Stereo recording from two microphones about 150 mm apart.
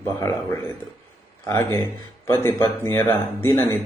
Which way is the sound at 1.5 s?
20° left (ahead or behind).